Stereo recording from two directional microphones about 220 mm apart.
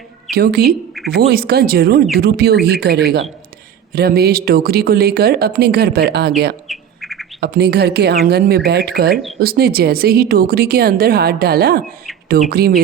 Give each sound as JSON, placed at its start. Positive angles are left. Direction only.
{"t": 0.3, "sound": "speech", "side_deg": -45}
{"t": 6.7, "sound": "bird", "side_deg": 0}
{"t": 7.3, "sound": "speech", "side_deg": -50}